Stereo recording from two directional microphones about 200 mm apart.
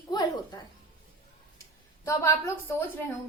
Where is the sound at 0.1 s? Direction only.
20° left (ahead or behind).